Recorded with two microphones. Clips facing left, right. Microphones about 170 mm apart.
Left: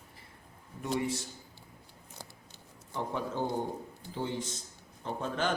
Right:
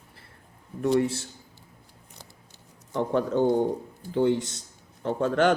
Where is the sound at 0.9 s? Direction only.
75° right (ahead or behind).